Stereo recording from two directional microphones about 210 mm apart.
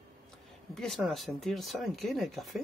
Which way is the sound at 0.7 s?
Centre (ahead or behind).